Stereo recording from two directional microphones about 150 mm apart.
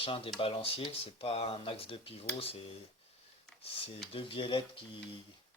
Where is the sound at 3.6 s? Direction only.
40° left (ahead or behind).